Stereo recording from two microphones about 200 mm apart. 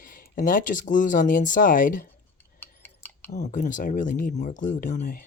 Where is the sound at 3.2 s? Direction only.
35° left (ahead or behind).